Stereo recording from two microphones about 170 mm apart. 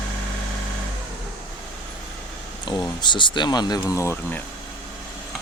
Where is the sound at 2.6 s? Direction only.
25° left (ahead or behind).